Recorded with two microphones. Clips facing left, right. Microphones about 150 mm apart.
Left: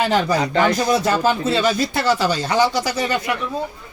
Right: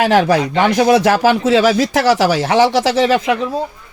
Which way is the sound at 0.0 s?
90° right.